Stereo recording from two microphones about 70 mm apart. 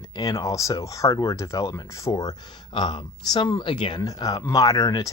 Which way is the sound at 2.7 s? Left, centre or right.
Left.